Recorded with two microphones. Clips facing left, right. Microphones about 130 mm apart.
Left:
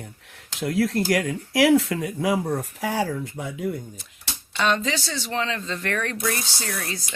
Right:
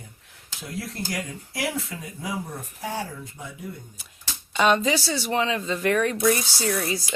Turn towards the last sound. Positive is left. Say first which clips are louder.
# right 6 dB
turn(degrees=-10)  # may be behind; listen again after turning